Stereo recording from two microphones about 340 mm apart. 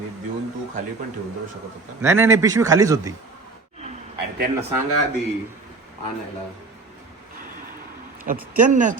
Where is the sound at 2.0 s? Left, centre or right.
Centre.